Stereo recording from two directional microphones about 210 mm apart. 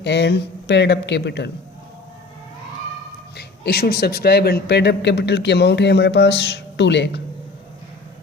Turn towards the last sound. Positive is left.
turn(degrees=55)  # may be behind; listen again after turning